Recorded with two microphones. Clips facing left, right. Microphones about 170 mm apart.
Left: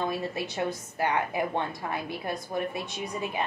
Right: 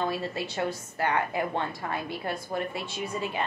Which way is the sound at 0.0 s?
15° left (ahead or behind).